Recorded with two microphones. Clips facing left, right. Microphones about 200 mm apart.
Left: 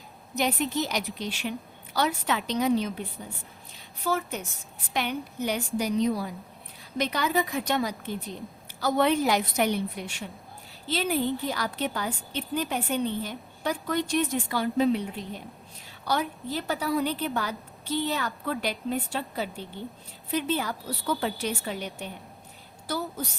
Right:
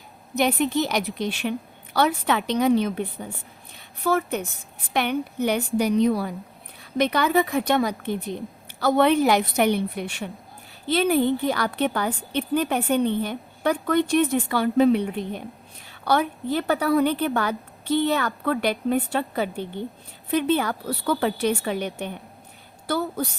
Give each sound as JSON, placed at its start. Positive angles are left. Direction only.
{"t": 0.3, "sound": "a woman's voice", "side_deg": -60}